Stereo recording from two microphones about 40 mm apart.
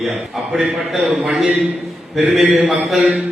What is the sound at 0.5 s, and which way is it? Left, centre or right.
Speech, centre.